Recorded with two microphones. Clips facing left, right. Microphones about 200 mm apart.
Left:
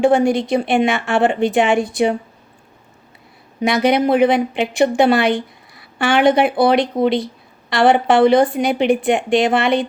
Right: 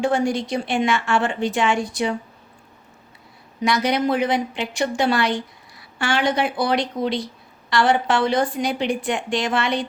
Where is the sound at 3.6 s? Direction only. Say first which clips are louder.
Left 5 dB; 60° left (ahead or behind).